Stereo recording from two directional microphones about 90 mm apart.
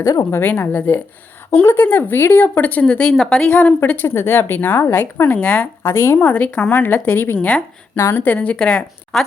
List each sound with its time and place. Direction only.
0.0 s speech: 35° left (ahead or behind); by 5.9 s 15° left (ahead or behind)
5.9 s speech: 25° left (ahead or behind); by 9.2 s 10° left (ahead or behind)